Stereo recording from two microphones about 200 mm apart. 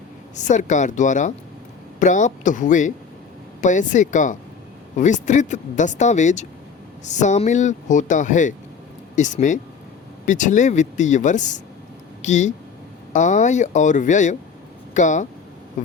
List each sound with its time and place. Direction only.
0.3 s speech: 35° left (ahead or behind)